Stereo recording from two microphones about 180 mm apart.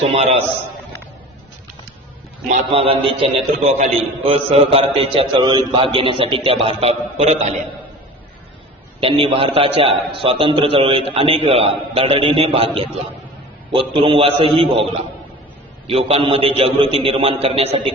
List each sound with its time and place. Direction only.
0.0 s a man's voice: 35° right (ahead or behind)
2.6 s a man's voice: 30° right (ahead or behind)
9.0 s a man's voice: 30° right (ahead or behind)
13.7 s a man's voice: 30° right (ahead or behind)
15.9 s a man's voice: 30° right (ahead or behind)